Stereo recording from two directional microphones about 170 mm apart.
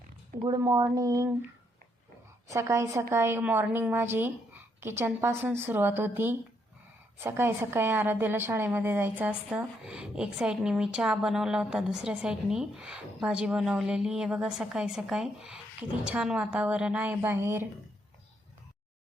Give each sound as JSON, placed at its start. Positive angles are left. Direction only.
{"t": 0.4, "sound": "speech", "side_deg": -20}
{"t": 2.5, "sound": "a woman's voice", "side_deg": -15}